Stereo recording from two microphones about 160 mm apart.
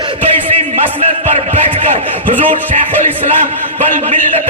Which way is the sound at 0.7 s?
40° right (ahead or behind).